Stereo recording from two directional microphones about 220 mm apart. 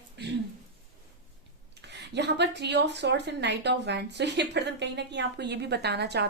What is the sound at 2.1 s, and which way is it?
Speech, 50° right (ahead or behind).